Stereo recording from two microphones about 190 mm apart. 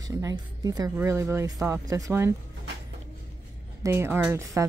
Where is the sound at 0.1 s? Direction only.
20° right (ahead or behind).